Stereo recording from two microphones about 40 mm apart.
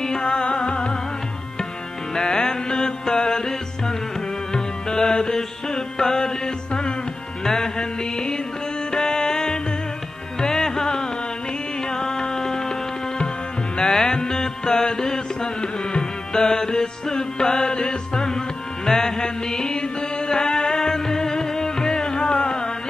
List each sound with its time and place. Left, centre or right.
0.0 s music: centre
2.1 s music: centre
13.7 s music: centre